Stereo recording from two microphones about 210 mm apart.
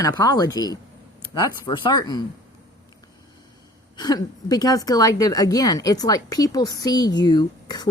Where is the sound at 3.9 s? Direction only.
20° left (ahead or behind).